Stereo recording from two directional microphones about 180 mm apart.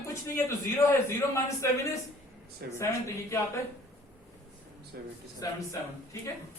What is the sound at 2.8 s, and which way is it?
Speech, 15° left (ahead or behind).